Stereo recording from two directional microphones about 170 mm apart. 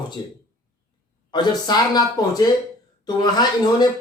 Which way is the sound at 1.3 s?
25° left (ahead or behind).